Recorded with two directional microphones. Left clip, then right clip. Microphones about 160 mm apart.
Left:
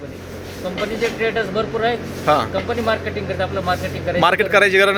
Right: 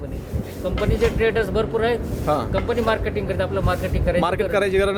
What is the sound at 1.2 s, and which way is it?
Speech, 35° right (ahead or behind).